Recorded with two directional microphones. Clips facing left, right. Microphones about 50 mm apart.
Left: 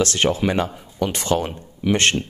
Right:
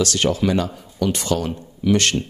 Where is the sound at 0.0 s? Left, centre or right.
Left.